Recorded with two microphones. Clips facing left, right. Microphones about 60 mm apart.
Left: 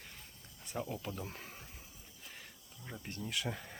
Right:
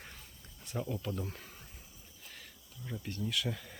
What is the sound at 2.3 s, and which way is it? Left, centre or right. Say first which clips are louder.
Insect: even; centre.